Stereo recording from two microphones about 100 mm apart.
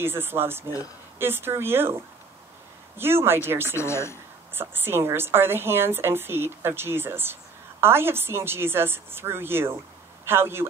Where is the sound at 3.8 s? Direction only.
25° left (ahead or behind).